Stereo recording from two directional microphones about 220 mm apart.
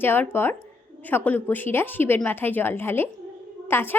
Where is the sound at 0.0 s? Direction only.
10° left (ahead or behind).